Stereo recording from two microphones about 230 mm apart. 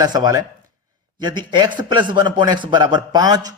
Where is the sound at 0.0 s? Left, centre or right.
Centre.